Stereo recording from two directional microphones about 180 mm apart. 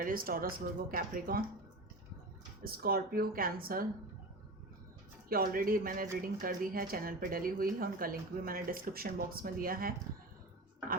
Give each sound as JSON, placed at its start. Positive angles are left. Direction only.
{"t": 0.0, "sound": "speech", "side_deg": -55}
{"t": 2.6, "sound": "speech", "side_deg": -55}
{"t": 5.3, "sound": "speech", "side_deg": -55}